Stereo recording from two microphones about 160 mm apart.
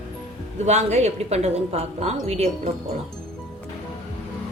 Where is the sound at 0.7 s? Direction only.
45° right (ahead or behind).